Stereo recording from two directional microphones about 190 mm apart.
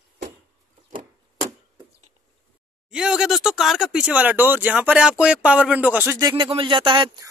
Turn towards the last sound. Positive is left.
turn(degrees=-25)  # may be behind; listen again after turning